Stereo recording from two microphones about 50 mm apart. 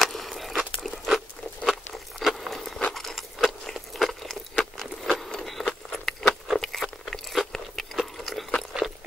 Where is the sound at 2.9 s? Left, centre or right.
Centre.